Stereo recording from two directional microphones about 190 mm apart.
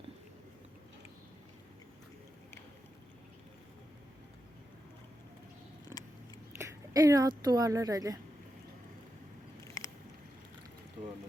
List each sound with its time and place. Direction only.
6.5 s speech: 15° right (ahead or behind)
9.8 s vehicle: 15° left (ahead or behind)